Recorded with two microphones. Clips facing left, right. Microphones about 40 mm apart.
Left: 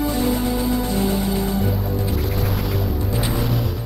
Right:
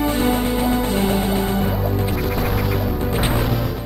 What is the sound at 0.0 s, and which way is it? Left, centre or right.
Music, right.